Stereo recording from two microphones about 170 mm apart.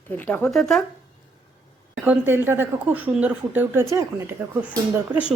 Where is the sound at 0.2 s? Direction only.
10° left (ahead or behind).